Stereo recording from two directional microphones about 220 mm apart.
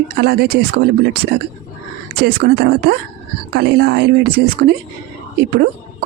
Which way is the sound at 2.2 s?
45° right (ahead or behind).